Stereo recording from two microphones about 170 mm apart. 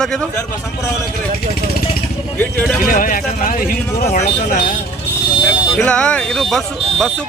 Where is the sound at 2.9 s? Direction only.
55° left (ahead or behind).